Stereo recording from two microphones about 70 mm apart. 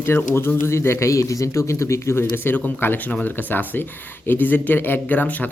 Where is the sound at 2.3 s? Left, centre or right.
Left.